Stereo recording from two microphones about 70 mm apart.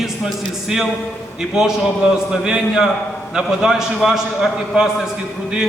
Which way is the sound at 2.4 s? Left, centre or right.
Centre.